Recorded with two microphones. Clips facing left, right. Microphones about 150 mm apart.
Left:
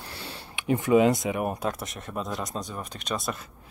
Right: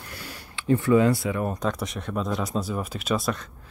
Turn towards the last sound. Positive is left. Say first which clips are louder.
# right 5 dB
turn(degrees=0)  # may be behind; listen again after turning